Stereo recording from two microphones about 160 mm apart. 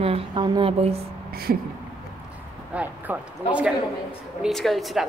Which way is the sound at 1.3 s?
70° right (ahead or behind).